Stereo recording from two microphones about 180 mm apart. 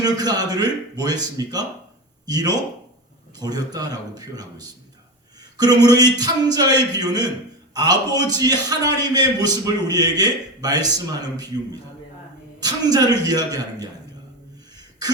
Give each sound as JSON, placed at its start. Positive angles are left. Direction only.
{"t": 0.0, "sound": "a man's voice", "side_deg": -20}